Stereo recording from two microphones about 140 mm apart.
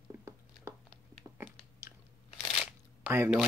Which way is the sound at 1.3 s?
15° right (ahead or behind).